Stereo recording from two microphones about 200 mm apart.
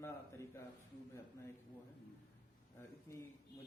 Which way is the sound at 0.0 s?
10° left (ahead or behind).